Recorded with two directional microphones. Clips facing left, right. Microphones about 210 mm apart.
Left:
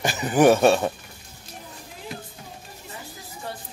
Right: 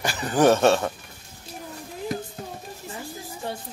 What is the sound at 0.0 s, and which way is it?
Speech, 20° left (ahead or behind).